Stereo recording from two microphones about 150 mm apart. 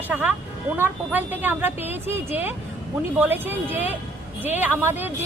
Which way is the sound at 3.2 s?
15° right (ahead or behind).